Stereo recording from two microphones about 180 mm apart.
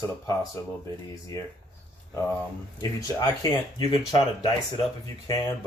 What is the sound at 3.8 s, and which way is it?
Speech, 20° left (ahead or behind).